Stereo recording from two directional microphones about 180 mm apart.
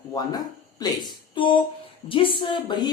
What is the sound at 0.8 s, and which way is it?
Speech, 25° left (ahead or behind).